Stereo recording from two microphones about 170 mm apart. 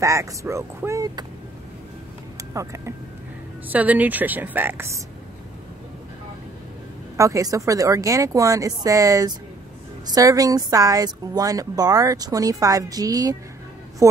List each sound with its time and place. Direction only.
0.0 s a woman's voice: 20° right (ahead or behind)
2.5 s a woman's voice: 20° right (ahead or behind)
7.2 s a woman's voice: 20° right (ahead or behind)